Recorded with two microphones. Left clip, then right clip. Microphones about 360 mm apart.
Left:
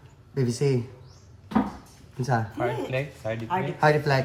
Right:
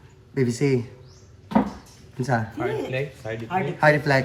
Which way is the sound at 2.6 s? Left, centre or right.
Left.